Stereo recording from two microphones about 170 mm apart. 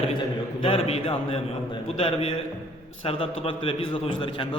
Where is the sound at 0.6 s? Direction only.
35° left (ahead or behind).